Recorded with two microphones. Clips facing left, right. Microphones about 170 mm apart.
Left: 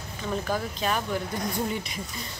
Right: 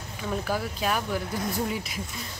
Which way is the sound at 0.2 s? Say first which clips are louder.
Even; 5° right (ahead or behind).